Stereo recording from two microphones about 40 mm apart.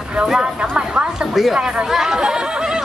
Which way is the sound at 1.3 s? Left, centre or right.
Centre.